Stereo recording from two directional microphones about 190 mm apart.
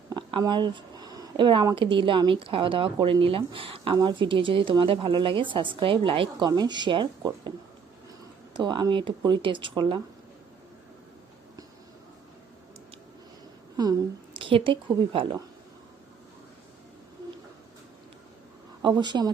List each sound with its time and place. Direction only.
0.1 s a woman's voice: 25° right (ahead or behind)
8.5 s a woman's voice: 25° right (ahead or behind)
13.7 s a woman's voice: 20° right (ahead or behind)
18.8 s a woman's voice: 25° right (ahead or behind)